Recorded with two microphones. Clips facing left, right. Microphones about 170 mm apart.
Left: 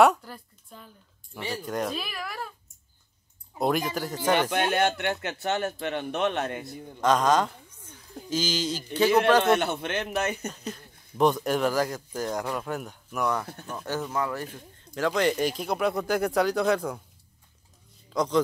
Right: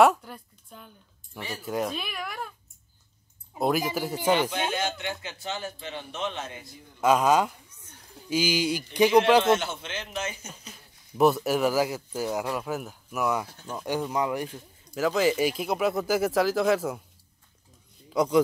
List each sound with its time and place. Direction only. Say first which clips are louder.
0.0 s speech: even; centre (ahead or behind)
3.5 s speech: even; 5° right (ahead or behind)
4.5 s a man's voice: left 5 dB; 65° left (ahead or behind)
7.0 s speech: right 1 dB; 10° right (ahead or behind)
9.4 s a man's voice: left 1 dB; 60° left (ahead or behind)
10.5 s speech: left 9 dB; 5° right (ahead or behind)
18.1 s a man's voice: right 2 dB; 10° right (ahead or behind)